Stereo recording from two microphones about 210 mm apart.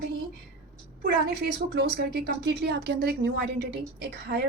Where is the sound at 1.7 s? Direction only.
55° right (ahead or behind).